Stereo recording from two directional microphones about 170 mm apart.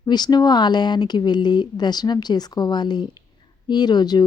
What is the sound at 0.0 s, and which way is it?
Speech, 25° left (ahead or behind).